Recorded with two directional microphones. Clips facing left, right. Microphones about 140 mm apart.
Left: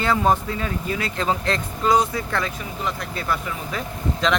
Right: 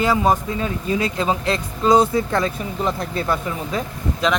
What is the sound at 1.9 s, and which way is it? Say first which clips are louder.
Speech: right 6 dB; 25° right (ahead or behind).